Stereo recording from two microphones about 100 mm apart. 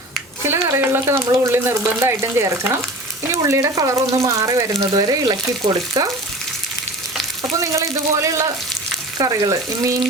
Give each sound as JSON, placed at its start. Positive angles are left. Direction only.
{"t": 0.7, "sound": "speech", "side_deg": -25}
{"t": 7.6, "sound": "speech", "side_deg": -30}